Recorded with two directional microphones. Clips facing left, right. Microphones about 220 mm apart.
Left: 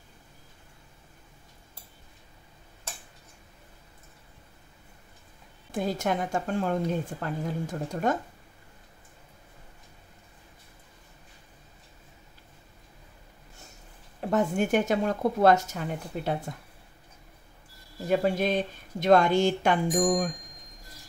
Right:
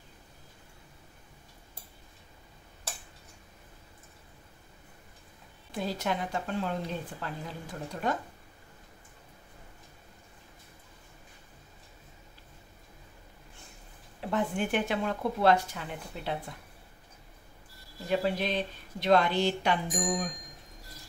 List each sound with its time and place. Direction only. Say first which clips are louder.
5.7 s speech: left 4 dB; 50° left (ahead or behind)
14.3 s speech: left 5 dB; 45° left (ahead or behind)
18.0 s speech: left 4 dB; 45° left (ahead or behind)